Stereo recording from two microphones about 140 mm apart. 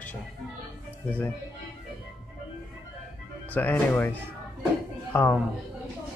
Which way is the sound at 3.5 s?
15° left (ahead or behind).